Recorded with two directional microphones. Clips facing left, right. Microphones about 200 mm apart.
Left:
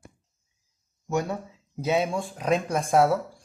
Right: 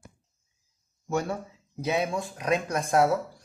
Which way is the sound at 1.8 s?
25° left (ahead or behind).